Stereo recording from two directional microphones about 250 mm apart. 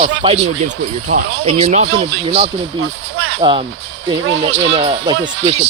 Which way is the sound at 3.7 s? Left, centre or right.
Right.